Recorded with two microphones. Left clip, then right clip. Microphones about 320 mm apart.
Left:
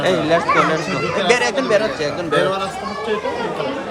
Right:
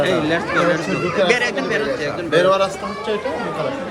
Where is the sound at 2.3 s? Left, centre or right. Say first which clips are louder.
Right 4 dB; centre.